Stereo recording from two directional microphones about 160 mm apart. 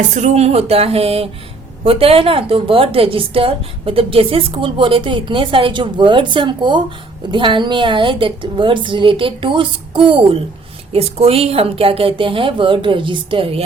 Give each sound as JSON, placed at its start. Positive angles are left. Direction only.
{"t": 0.1, "sound": "a woman's voice", "side_deg": -50}